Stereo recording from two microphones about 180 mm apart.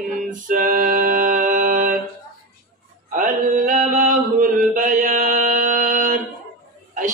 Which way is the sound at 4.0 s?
45° right (ahead or behind).